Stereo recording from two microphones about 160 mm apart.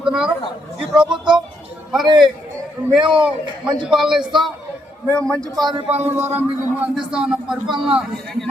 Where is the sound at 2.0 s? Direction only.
30° right (ahead or behind).